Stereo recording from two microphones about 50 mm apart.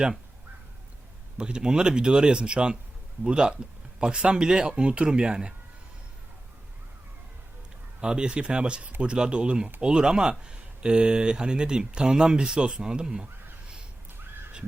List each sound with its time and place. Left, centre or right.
1.4 s speech: centre
8.0 s speech: centre